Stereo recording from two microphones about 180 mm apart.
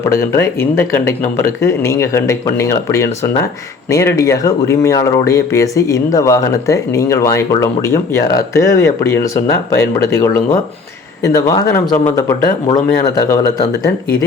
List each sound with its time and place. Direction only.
0.1 s speech: 15° left (ahead or behind)